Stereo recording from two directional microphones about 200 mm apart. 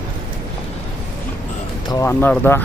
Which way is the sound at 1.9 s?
15° left (ahead or behind).